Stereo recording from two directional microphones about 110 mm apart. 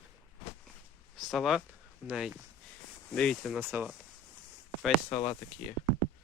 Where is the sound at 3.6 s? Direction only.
20° right (ahead or behind).